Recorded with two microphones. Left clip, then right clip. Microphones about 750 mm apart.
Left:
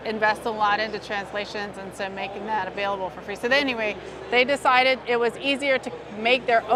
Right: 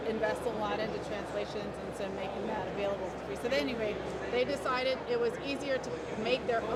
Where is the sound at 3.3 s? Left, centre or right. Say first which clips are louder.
Left 11 dB; left.